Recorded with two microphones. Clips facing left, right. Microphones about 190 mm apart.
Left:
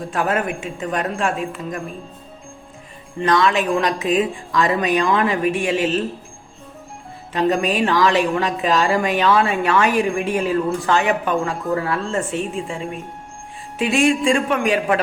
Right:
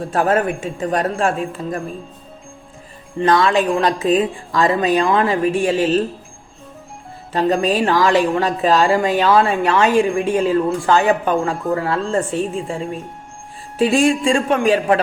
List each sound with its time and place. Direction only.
0.0 s speech: 35° right (ahead or behind)
3.2 s speech: 35° right (ahead or behind)
7.3 s speech: 35° right (ahead or behind)